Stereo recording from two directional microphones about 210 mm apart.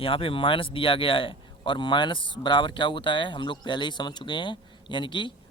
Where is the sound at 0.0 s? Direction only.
25° left (ahead or behind).